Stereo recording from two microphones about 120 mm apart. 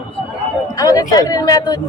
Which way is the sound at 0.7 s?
30° left (ahead or behind).